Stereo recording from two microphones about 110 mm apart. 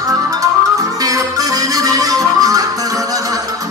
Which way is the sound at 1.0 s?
30° right (ahead or behind).